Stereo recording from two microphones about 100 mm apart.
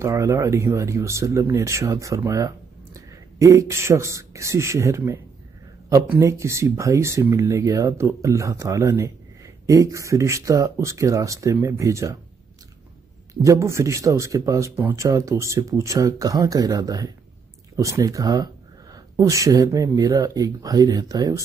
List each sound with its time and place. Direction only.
0.0 s speech: 30° right (ahead or behind)
13.3 s speech: 30° right (ahead or behind)